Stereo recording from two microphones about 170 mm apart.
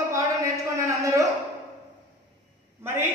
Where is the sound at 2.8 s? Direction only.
15° right (ahead or behind).